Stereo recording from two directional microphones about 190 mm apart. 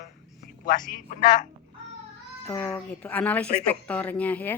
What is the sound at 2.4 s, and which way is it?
Speech, 20° left (ahead or behind).